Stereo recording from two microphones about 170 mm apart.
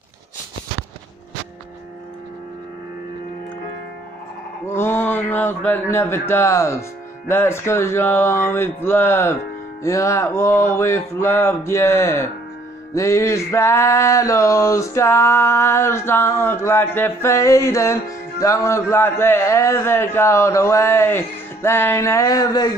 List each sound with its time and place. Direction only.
4.6 s male singing: 15° left (ahead or behind)